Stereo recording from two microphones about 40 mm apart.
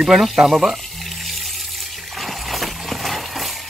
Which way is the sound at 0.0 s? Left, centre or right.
Centre.